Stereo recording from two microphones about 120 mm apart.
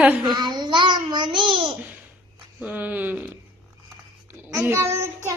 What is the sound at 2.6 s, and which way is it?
Music, 15° right (ahead or behind).